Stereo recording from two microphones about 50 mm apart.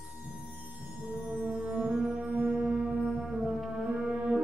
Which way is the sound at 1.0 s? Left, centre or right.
Right.